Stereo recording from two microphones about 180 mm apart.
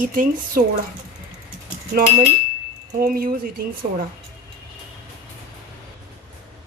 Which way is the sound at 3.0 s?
55° right (ahead or behind).